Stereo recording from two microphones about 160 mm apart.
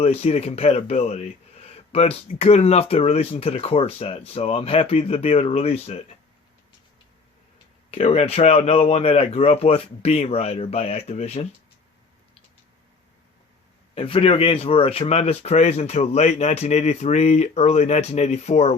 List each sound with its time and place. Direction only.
0.0 s speech: 40° left (ahead or behind)
7.9 s speech: 40° left (ahead or behind)
13.9 s speech: 35° left (ahead or behind)